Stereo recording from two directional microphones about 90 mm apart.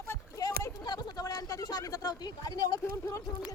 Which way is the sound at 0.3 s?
45° left (ahead or behind).